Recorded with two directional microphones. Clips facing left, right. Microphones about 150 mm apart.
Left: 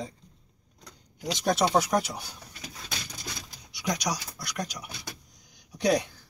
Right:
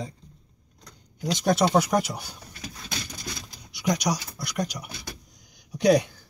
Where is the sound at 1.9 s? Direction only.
5° right (ahead or behind).